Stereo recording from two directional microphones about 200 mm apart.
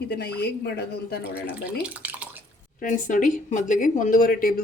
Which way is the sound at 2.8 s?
40° left (ahead or behind).